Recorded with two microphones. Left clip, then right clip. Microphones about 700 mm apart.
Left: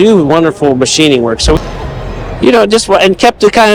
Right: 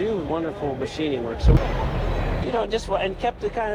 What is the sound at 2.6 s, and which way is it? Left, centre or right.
A man's voice, left.